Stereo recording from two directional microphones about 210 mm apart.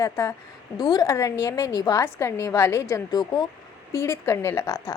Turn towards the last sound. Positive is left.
turn(degrees=15)  # may be behind; listen again after turning